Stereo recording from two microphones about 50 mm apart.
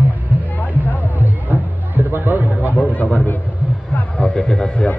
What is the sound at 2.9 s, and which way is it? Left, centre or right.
A man's voice, left.